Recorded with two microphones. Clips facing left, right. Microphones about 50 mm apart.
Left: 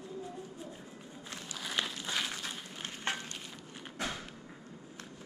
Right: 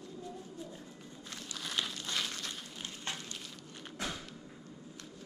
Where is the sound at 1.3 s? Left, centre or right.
Centre.